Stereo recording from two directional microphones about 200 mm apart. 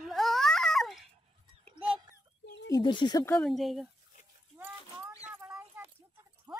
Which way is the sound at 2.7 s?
25° left (ahead or behind).